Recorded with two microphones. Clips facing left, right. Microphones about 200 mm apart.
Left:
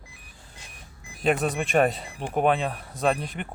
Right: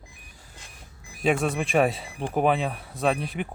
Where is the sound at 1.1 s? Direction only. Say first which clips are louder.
Even; centre (ahead or behind).